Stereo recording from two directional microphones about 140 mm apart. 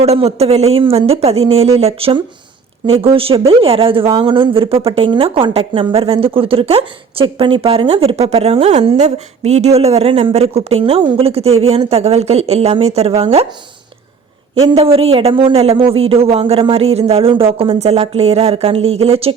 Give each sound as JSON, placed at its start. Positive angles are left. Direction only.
{"t": 0.0, "sound": "a woman's voice", "side_deg": -50}
{"t": 14.5, "sound": "a woman's voice", "side_deg": -45}